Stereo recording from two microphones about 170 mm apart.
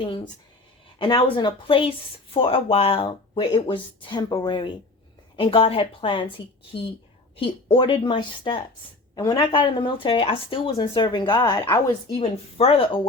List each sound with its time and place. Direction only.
0.9 s speech: 30° left (ahead or behind)
7.3 s speech: 30° left (ahead or behind)